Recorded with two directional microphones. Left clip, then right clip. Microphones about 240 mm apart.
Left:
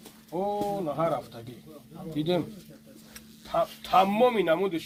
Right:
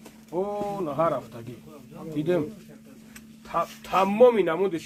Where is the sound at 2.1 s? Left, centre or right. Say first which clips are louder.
Right 2 dB; centre.